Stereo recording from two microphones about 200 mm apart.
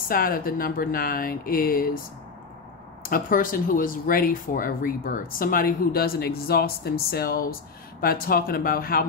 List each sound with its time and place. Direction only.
0.1 s speech: 45° left (ahead or behind)
3.0 s speech: 45° left (ahead or behind)